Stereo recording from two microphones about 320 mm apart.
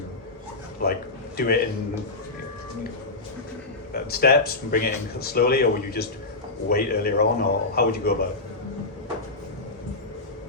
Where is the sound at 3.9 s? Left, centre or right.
Left.